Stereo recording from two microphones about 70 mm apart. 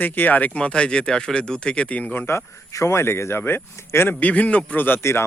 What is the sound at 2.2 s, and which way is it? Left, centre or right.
Speech, left.